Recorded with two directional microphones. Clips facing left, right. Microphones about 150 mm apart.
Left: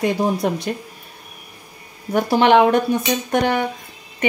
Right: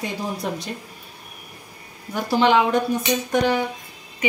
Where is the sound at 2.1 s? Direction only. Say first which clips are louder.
Left 4 dB; 60° left (ahead or behind).